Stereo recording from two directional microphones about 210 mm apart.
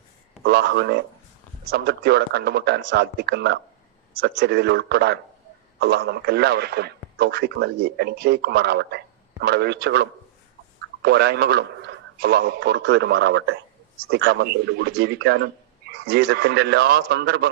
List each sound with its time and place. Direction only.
0.4 s a man's voice: 50° right (ahead or behind)